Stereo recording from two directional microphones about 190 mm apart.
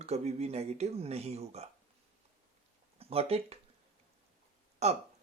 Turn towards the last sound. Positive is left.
turn(degrees=-35)  # may be behind; listen again after turning